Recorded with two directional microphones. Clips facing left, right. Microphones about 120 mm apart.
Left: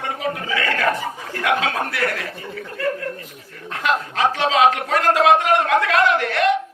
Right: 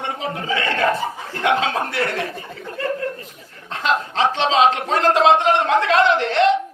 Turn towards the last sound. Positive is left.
turn(degrees=-25)  # may be behind; listen again after turning